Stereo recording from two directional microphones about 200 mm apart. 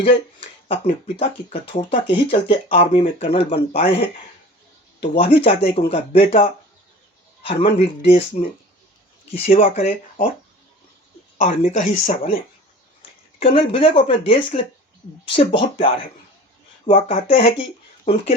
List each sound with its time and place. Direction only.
0.0 s speech: 25° left (ahead or behind)
11.3 s speech: 35° left (ahead or behind)
13.4 s speech: 25° left (ahead or behind)